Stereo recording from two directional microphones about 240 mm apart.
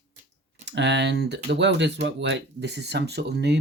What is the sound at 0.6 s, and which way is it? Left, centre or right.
Speech, right.